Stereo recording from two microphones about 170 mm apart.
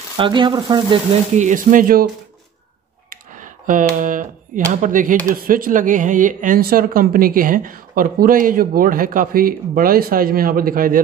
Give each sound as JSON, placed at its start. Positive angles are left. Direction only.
{"t": 0.2, "sound": "speech", "side_deg": -30}
{"t": 1.3, "sound": "speech", "side_deg": -45}
{"t": 3.1, "sound": "a sound", "side_deg": -50}
{"t": 4.0, "sound": "speech", "side_deg": -50}